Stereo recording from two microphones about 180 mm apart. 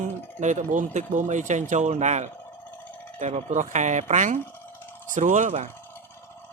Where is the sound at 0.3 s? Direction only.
45° right (ahead or behind).